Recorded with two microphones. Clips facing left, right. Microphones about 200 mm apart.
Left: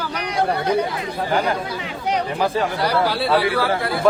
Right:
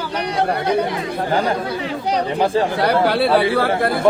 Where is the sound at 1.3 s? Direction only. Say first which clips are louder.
Right 2 dB; 30° right (ahead or behind).